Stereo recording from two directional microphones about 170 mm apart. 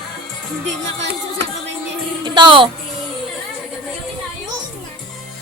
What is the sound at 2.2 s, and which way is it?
Speech, 30° right (ahead or behind).